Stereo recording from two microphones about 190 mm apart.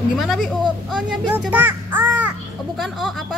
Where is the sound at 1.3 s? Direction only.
10° right (ahead or behind).